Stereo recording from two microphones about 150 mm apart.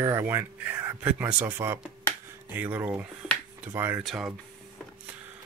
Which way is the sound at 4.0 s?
Centre (ahead or behind).